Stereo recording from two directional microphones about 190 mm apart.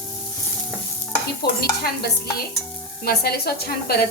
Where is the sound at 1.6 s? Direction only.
55° left (ahead or behind).